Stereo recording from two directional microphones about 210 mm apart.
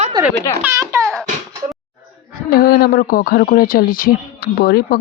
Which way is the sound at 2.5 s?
50° left (ahead or behind).